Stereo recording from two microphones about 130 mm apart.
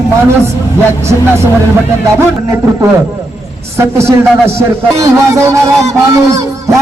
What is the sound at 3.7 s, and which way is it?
Speech, 20° right (ahead or behind).